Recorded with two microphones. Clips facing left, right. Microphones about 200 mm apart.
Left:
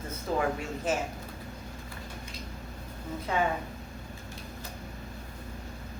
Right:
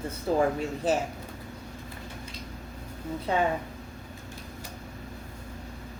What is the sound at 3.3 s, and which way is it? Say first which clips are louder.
Speech: right 3 dB; 35° right (ahead or behind).